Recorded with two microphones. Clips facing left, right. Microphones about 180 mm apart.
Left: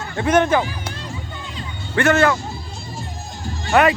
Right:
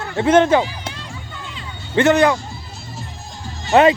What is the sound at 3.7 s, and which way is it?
Speech, 25° right (ahead or behind).